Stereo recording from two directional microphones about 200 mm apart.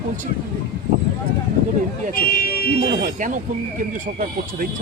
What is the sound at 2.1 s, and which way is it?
Speech, 45° left (ahead or behind).